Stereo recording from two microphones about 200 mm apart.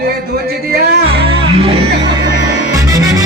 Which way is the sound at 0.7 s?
50° right (ahead or behind).